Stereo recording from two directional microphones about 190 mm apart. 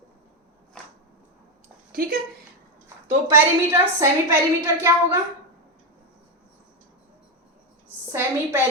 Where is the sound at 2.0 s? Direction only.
50° right (ahead or behind).